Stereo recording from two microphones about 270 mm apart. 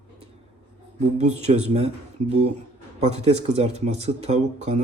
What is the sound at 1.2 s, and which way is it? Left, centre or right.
Speech, right.